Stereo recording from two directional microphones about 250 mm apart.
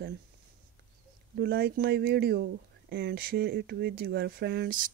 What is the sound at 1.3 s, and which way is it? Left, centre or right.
Speech, right.